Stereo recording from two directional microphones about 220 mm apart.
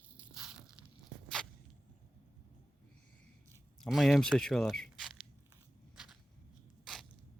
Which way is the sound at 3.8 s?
Centre (ahead or behind).